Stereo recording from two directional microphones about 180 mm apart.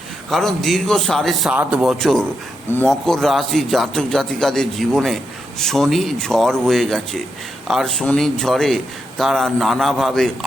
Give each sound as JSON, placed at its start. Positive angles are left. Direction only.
{"t": 0.3, "sound": "a man's voice", "side_deg": 0}